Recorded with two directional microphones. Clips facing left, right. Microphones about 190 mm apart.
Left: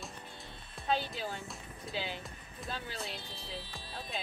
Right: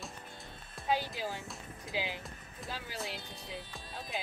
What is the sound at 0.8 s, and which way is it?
Speech, 15° right (ahead or behind).